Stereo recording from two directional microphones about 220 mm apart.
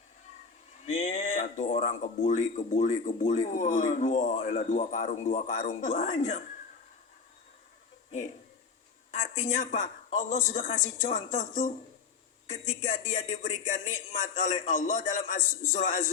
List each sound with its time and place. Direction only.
0.9 s speech: 30° left (ahead or behind)
9.1 s speech: 30° left (ahead or behind)